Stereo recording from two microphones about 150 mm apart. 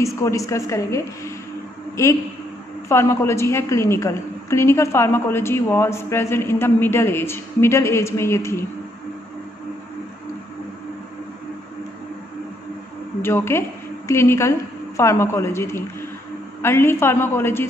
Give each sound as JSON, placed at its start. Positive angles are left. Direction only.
{"t": 0.0, "sound": "a woman's voice", "side_deg": 20}
{"t": 13.2, "sound": "a woman's voice", "side_deg": 15}